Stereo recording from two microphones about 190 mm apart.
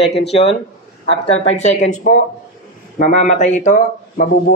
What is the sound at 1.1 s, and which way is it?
Speech, 90° left.